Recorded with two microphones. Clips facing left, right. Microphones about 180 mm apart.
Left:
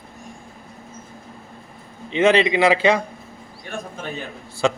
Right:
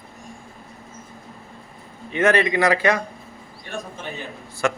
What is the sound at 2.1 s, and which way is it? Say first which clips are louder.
Speech: left 2 dB; 25° left (ahead or behind).